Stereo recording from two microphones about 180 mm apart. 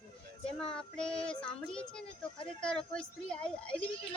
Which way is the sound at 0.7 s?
5° left (ahead or behind).